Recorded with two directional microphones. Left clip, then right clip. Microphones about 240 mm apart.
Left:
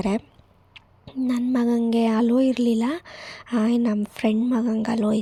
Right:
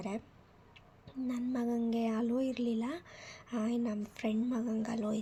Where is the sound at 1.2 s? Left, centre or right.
Left.